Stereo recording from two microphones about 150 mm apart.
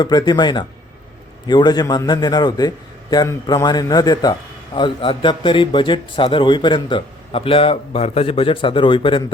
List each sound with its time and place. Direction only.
0.0 s a man's voice: 30° left (ahead or behind)